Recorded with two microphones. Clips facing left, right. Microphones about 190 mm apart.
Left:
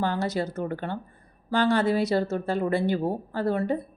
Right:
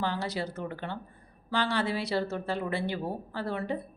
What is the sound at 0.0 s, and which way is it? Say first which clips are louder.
Speech: left 5 dB; 45° left (ahead or behind).